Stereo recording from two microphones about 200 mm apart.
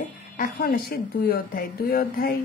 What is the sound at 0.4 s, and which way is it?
A woman's voice, 50° left (ahead or behind).